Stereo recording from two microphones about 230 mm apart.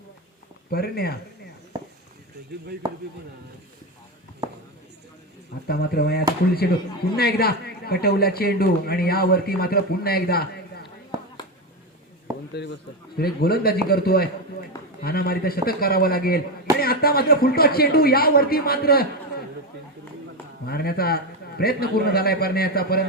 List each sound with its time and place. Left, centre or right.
0.7 s a man's voice: left
5.6 s a man's voice: left
11.1 s a sound: centre
12.6 s a man's voice: left
20.7 s a man's voice: left